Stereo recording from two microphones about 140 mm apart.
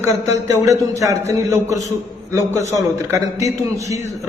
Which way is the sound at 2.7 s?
20° right (ahead or behind).